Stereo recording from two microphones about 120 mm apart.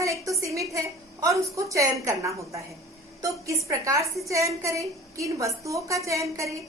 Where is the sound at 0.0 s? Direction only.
25° right (ahead or behind).